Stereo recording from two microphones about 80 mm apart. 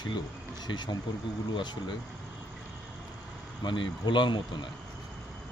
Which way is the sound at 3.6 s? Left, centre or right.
Left.